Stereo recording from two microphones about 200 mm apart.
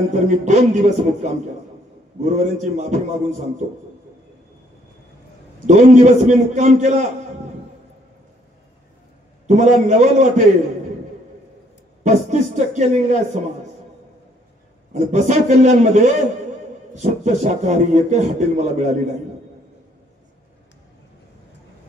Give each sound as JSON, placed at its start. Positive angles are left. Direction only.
{"t": 0.1, "sound": "a man's voice", "side_deg": -35}
{"t": 5.7, "sound": "a man's voice", "side_deg": -35}
{"t": 9.5, "sound": "a man's voice", "side_deg": -35}
{"t": 12.0, "sound": "a man's voice", "side_deg": -35}
{"t": 14.9, "sound": "a man's voice", "side_deg": -35}